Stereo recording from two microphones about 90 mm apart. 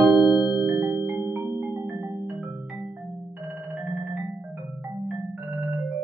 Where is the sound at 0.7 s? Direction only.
25° right (ahead or behind).